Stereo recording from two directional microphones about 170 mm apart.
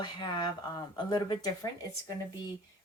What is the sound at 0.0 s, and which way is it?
Speech, 25° left (ahead or behind).